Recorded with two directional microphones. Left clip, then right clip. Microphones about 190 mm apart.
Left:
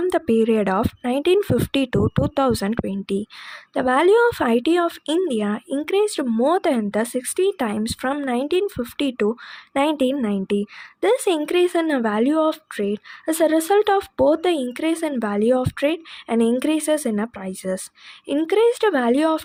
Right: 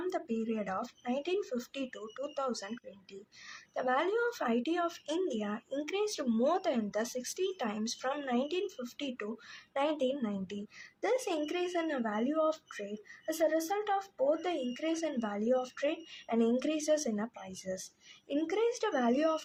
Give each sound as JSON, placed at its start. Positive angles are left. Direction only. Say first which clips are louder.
{"t": 0.1, "sound": "speech", "louder": "left 18 dB", "side_deg": 50}